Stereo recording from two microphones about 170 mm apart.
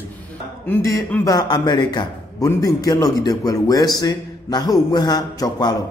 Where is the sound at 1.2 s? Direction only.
25° left (ahead or behind).